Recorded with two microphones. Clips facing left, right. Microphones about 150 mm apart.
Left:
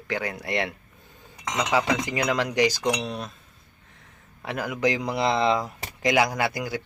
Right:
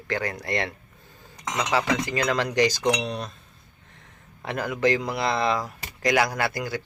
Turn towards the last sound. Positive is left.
turn(degrees=15)  # may be behind; listen again after turning